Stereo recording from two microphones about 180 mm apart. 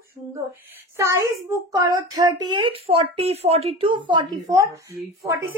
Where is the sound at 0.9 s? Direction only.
15° right (ahead or behind).